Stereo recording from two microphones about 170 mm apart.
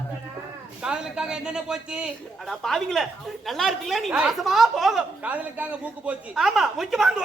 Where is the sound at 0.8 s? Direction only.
5° right (ahead or behind).